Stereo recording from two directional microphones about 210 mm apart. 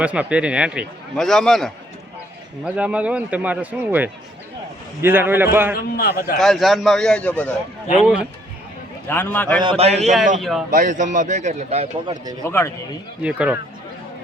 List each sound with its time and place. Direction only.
0.0 s a man's voice: 5° right (ahead or behind)
5.7 s a man's voice: 45° left (ahead or behind)
6.4 s a man's voice: centre (ahead or behind)
8.0 s a man's voice: 5° right (ahead or behind)
9.0 s a man's voice: 10° left (ahead or behind)
9.6 s a man's voice: 25° right (ahead or behind)
10.0 s a man's voice: centre (ahead or behind)
10.7 s a man's voice: 40° right (ahead or behind)
12.5 s a man's voice: 10° left (ahead or behind)
13.2 s a man's voice: 5° right (ahead or behind)